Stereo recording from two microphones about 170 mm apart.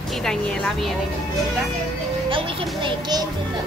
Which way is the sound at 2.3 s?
30° right (ahead or behind).